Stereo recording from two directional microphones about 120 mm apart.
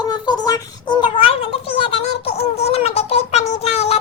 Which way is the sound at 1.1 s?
50° left (ahead or behind).